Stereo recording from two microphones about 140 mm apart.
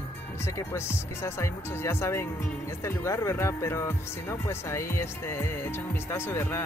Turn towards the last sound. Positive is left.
turn(degrees=15)  # may be behind; listen again after turning